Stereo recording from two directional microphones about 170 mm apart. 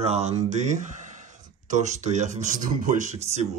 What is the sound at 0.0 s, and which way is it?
Speech, 40° right (ahead or behind).